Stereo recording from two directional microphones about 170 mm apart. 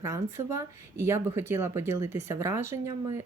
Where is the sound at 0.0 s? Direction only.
15° right (ahead or behind).